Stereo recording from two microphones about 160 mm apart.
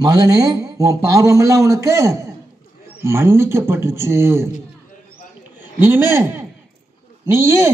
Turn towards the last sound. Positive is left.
turn(degrees=-15)  # may be behind; listen again after turning